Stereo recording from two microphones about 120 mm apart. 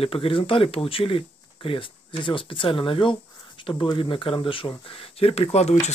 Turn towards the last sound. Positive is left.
turn(degrees=60)  # may be behind; listen again after turning